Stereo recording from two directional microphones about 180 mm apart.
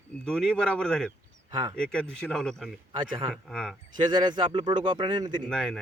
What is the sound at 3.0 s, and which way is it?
Speech, 25° right (ahead or behind).